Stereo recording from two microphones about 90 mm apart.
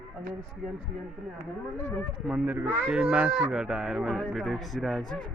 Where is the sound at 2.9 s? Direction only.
10° right (ahead or behind).